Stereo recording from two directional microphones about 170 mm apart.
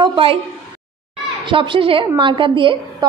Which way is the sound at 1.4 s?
30° right (ahead or behind).